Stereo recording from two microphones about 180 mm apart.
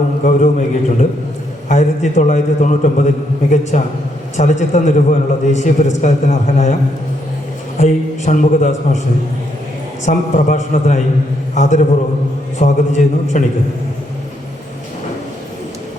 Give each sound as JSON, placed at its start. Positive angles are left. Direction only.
{"t": 0.3, "sound": "a man's voice", "side_deg": 45}
{"t": 7.8, "sound": "a man's voice", "side_deg": 40}
{"t": 10.1, "sound": "a man's voice", "side_deg": 45}